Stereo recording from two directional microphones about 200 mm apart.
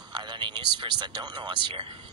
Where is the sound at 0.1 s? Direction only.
20° right (ahead or behind).